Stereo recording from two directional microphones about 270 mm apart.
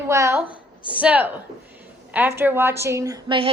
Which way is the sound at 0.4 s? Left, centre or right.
Centre.